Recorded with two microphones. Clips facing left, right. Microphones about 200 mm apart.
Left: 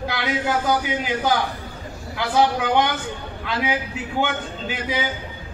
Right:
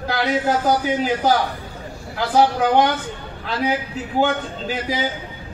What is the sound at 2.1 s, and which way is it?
Speech, 40° right (ahead or behind).